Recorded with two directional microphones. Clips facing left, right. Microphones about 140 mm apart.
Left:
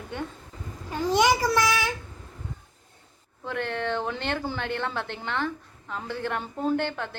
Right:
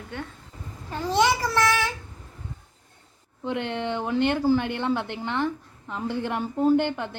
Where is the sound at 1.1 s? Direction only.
15° left (ahead or behind).